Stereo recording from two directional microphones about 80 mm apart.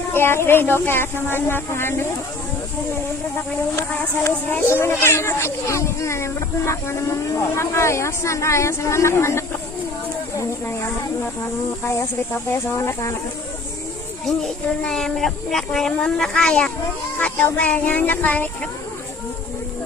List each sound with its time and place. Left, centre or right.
0.1 s speech: left
3.8 s speech: left
14.3 s speech: centre